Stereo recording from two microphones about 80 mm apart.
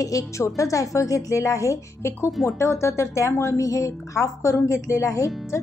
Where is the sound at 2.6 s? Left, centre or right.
Left.